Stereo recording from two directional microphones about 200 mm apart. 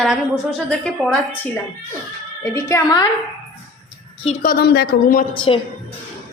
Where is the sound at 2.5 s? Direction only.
15° left (ahead or behind).